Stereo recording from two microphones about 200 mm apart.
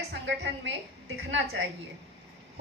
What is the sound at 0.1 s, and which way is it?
A woman's voice, 60° right (ahead or behind).